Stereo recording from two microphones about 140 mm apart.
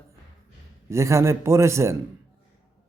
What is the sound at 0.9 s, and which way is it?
Speech, 20° right (ahead or behind).